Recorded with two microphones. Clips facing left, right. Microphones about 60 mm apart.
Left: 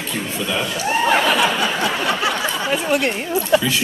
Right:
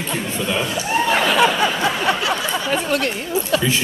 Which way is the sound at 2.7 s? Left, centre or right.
Centre.